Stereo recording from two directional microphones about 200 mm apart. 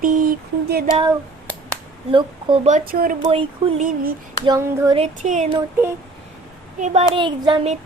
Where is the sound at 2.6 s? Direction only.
40° right (ahead or behind).